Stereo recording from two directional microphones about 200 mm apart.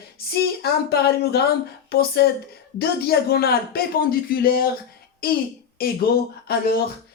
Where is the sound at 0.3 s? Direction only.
50° left (ahead or behind).